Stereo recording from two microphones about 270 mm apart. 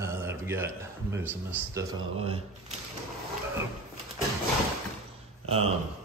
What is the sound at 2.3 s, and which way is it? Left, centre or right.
Speech, right.